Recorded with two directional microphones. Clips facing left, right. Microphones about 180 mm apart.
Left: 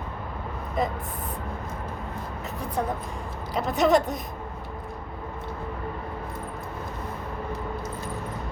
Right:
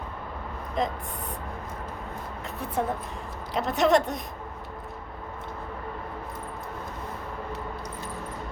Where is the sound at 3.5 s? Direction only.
Centre (ahead or behind).